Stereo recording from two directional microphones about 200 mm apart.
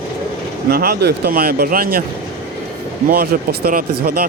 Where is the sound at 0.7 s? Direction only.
50° right (ahead or behind).